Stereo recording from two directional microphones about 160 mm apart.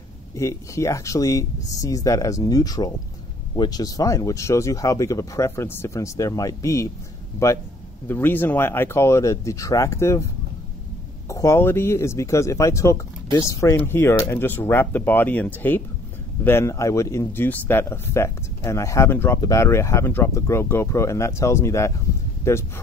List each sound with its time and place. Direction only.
0.4 s speech: 20° left (ahead or behind)